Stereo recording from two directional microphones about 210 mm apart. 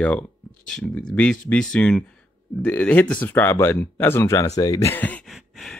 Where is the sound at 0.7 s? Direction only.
5° left (ahead or behind).